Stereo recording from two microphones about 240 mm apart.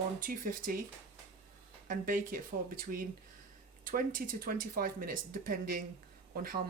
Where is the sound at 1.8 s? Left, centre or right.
Right.